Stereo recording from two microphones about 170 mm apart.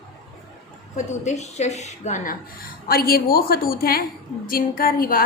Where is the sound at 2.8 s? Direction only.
60° left (ahead or behind).